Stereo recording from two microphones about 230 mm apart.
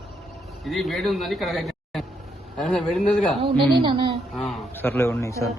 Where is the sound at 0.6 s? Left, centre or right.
Centre.